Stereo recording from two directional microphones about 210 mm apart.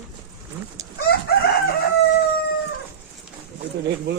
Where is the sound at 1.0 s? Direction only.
45° left (ahead or behind).